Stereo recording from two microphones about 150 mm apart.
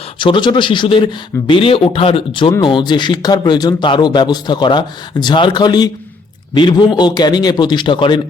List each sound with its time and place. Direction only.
0.2 s a man's voice: 35° left (ahead or behind)